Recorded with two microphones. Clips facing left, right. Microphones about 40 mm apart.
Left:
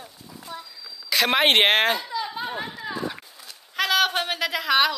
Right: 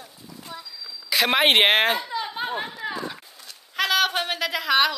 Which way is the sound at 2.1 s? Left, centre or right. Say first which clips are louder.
Right 1 dB; right.